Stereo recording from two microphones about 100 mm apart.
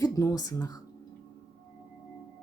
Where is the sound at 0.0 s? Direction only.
35° left (ahead or behind).